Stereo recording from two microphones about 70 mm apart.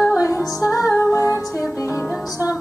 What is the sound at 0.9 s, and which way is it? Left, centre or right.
Music, left.